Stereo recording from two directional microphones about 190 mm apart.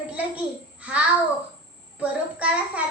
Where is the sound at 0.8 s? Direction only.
5° right (ahead or behind).